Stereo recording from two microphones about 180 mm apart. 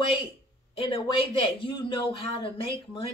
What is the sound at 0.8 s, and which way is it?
Speech, 30° left (ahead or behind).